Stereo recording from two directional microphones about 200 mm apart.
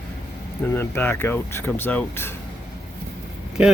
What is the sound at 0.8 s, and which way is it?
Speech, 10° left (ahead or behind).